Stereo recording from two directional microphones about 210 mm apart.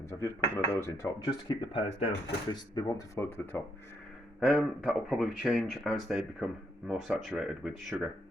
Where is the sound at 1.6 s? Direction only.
25° left (ahead or behind); by 3.6 s 10° left (ahead or behind).